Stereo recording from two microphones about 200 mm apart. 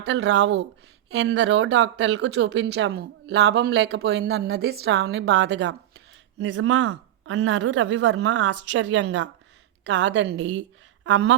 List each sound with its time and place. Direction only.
0.0 s speech: 60° right (ahead or behind)
6.4 s speech: 75° right (ahead or behind)
11.0 s speech: 65° right (ahead or behind)